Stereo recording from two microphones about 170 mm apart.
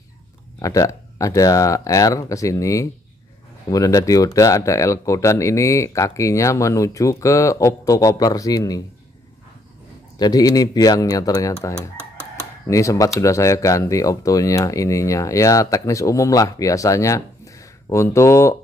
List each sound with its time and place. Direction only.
0.6 s speech: 20° left (ahead or behind)
10.1 s speech: 25° left (ahead or behind)
12.6 s speech: 20° left (ahead or behind)